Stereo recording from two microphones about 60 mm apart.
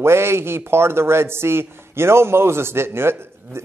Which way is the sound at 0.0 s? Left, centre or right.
Right.